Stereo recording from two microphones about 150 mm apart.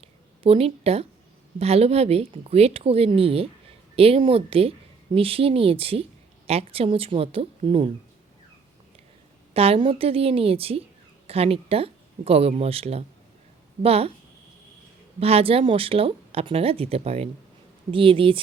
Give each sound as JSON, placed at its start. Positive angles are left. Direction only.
{"t": 0.0, "sound": "a sound", "side_deg": -40}
{"t": 1.5, "sound": "speech", "side_deg": -45}
{"t": 9.5, "sound": "speech", "side_deg": -40}
{"t": 15.2, "sound": "speech", "side_deg": -40}